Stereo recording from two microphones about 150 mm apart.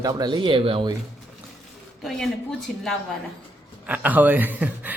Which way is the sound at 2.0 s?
Centre (ahead or behind).